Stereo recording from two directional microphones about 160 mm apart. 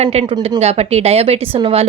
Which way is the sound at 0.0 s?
45° right (ahead or behind).